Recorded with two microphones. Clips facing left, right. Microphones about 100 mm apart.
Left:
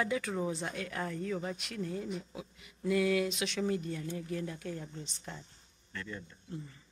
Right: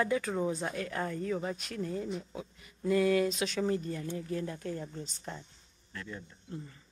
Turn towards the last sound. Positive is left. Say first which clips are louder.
# even
turn(degrees=-10)  # may be behind; listen again after turning